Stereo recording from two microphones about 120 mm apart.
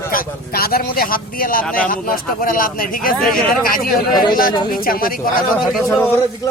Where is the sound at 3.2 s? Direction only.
Centre (ahead or behind).